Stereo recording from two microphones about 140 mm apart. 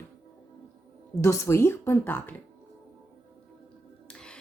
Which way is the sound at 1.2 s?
20° left (ahead or behind).